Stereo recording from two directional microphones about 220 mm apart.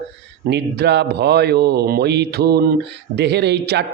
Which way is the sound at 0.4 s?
50° right (ahead or behind).